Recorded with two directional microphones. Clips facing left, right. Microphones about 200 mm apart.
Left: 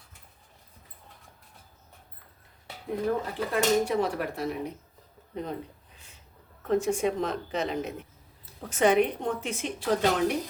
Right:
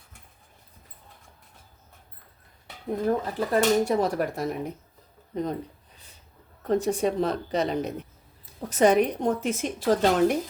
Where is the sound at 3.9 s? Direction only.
40° right (ahead or behind).